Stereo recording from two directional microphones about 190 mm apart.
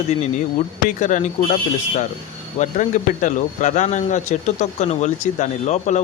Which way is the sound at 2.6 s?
40° left (ahead or behind).